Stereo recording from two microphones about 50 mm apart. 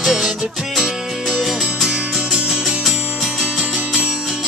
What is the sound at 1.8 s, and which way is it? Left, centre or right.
Music, centre.